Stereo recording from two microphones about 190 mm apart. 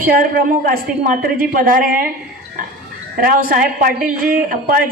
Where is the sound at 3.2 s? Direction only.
50° right (ahead or behind).